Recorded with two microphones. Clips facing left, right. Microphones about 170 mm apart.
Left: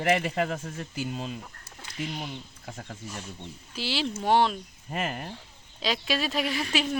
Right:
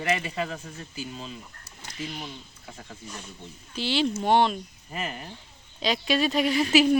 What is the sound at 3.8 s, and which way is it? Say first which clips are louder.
Speech: right 5 dB; 5° left (ahead or behind).